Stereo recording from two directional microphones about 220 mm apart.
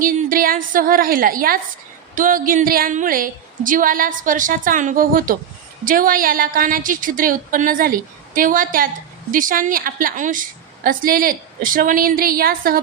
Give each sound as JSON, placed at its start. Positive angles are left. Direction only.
{"t": 0.0, "sound": "a woman's voice", "side_deg": -40}